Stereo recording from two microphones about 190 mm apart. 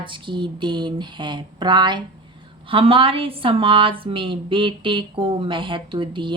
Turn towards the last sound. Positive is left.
turn(degrees=-25)  # may be behind; listen again after turning